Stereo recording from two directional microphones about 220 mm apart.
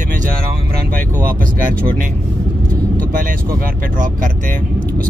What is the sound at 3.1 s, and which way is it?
Speech, 40° right (ahead or behind).